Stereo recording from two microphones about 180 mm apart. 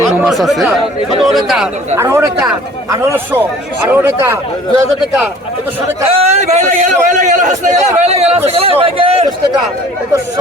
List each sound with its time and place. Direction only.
0.2 s speech: centre (ahead or behind)
2.0 s speech: 15° right (ahead or behind)
6.1 s a man's voice: 35° right (ahead or behind)